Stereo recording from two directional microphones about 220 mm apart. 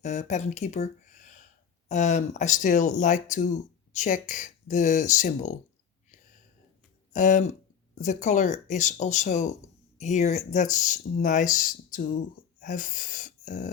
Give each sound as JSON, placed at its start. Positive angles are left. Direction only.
{"t": 0.0, "sound": "speech", "side_deg": 30}
{"t": 7.1, "sound": "speech", "side_deg": 35}